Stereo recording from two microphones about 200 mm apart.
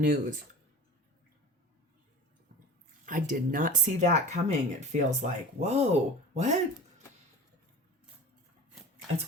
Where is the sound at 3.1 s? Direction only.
45° right (ahead or behind).